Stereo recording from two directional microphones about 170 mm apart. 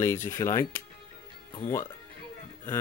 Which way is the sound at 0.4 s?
15° left (ahead or behind).